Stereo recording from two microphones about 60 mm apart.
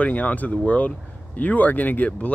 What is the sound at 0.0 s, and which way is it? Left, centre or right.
Speech, left.